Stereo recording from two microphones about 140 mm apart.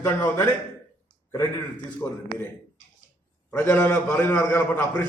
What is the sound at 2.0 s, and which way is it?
Speech, 20° left (ahead or behind).